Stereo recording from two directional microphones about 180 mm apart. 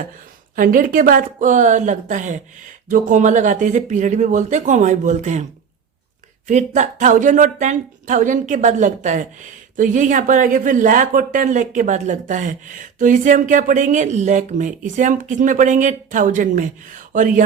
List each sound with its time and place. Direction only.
0.5 s a woman's voice: 50° right (ahead or behind)
6.5 s a woman's voice: 40° right (ahead or behind)